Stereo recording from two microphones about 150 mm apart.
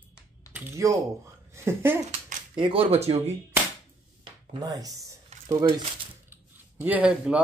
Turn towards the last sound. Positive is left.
turn(degrees=-10)  # may be behind; listen again after turning